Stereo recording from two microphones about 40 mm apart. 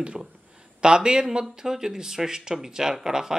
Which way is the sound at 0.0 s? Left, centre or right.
Right.